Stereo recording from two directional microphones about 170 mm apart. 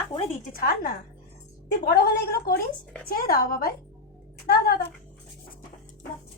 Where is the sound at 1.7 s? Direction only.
65° left (ahead or behind).